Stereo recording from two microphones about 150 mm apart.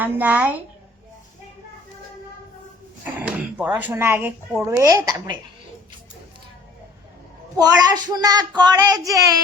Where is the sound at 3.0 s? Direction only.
10° right (ahead or behind).